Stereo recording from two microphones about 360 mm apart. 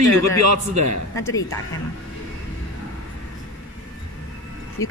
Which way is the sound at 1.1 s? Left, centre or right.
Centre.